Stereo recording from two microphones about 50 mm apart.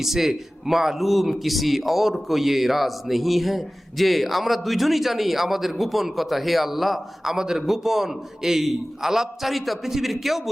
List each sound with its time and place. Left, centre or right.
0.0 s a man's voice: centre